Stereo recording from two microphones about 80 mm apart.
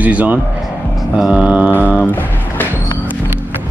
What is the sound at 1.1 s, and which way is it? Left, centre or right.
Mantra, centre.